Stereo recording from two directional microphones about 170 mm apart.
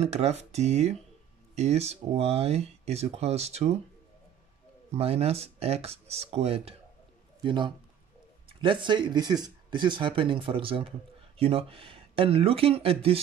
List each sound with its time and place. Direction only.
0.0 s speech: 40° right (ahead or behind)
4.9 s speech: 35° right (ahead or behind)